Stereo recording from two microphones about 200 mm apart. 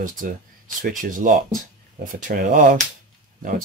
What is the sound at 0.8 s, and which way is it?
Speech, 40° right (ahead or behind).